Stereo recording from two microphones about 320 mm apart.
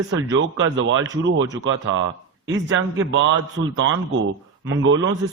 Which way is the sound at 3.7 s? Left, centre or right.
Right.